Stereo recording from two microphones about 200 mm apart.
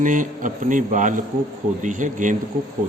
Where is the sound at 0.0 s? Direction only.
40° right (ahead or behind).